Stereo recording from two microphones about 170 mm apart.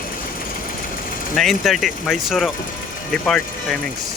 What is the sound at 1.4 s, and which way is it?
Speech, centre (ahead or behind).